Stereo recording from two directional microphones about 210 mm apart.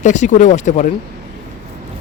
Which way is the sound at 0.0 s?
35° left (ahead or behind).